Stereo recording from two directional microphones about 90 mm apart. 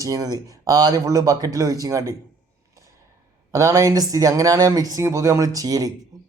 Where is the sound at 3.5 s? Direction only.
35° right (ahead or behind).